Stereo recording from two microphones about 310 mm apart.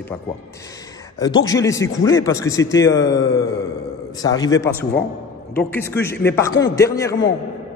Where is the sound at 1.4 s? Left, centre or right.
Centre.